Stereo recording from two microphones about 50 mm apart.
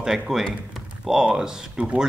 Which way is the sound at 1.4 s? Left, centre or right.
Centre.